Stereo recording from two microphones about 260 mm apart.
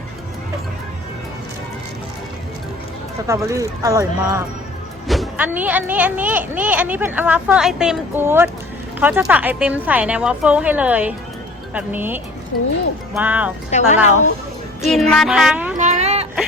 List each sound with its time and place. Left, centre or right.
3.2 s speech: centre
5.0 s a child's voice: centre
13.7 s a woman's voice: left
14.8 s a child's voice: centre
15.8 s a sound: right